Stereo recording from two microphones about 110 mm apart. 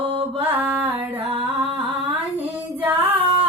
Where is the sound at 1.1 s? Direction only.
55° right (ahead or behind).